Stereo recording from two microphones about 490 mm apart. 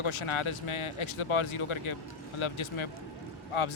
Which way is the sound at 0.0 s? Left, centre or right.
Left.